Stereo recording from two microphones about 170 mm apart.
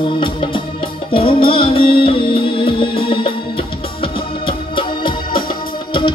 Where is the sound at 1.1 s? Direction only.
35° left (ahead or behind).